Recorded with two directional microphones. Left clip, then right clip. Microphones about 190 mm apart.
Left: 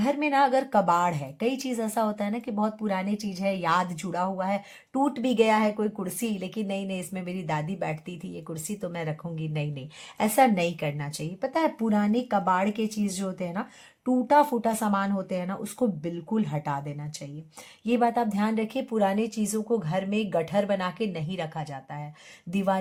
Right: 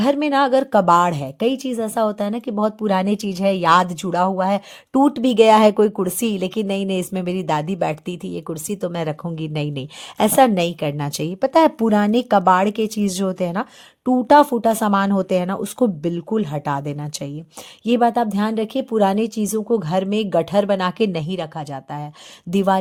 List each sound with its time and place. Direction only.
0.0 s a woman's voice: 40° right (ahead or behind)